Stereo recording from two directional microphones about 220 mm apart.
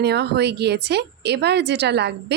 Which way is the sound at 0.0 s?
50° right (ahead or behind).